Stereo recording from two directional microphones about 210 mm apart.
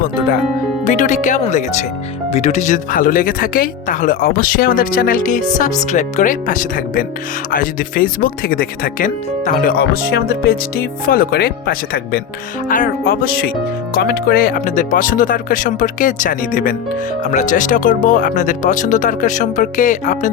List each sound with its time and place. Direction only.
0.9 s speech: 35° left (ahead or behind)